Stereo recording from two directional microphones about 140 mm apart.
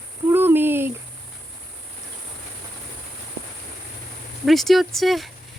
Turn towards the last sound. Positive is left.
turn(degrees=0)  # may be behind; listen again after turning